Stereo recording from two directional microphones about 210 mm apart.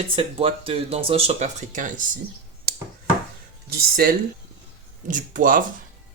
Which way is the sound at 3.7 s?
45° right (ahead or behind).